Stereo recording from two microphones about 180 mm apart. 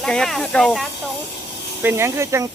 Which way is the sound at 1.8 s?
10° right (ahead or behind).